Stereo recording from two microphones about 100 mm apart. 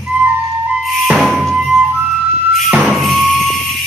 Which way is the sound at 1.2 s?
5° right (ahead or behind).